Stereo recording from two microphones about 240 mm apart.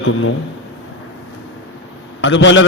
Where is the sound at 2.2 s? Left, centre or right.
Left.